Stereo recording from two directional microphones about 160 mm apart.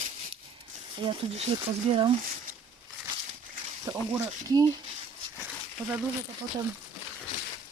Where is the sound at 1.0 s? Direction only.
30° right (ahead or behind).